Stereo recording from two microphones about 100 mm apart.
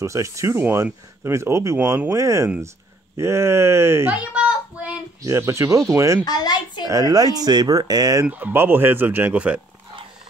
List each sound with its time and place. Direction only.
0.0 s speech: 30° right (ahead or behind)
4.1 s a sound: 10° right (ahead or behind)
5.2 s speech: 30° right (ahead or behind)
6.2 s a child's voice: 40° left (ahead or behind)
6.9 s speech: 35° right (ahead or behind)
8.3 s speech: 20° right (ahead or behind)